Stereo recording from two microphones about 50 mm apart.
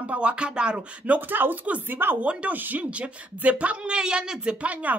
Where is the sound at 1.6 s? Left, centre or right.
Right.